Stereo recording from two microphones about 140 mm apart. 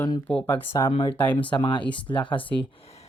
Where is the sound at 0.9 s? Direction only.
40° left (ahead or behind).